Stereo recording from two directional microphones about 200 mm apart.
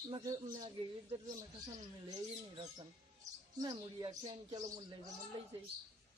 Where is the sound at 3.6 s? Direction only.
20° right (ahead or behind).